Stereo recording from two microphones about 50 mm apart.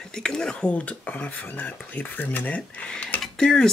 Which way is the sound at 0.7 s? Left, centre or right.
Left.